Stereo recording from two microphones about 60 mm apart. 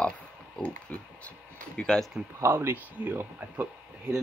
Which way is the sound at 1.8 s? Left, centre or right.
Centre.